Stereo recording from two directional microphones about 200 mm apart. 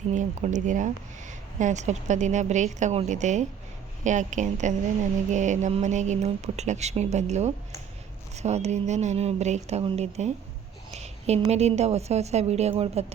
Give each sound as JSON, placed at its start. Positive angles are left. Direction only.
{"t": 0.1, "sound": "a woman's voice", "side_deg": -40}